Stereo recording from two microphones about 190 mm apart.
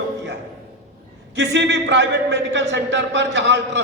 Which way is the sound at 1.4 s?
65° right (ahead or behind).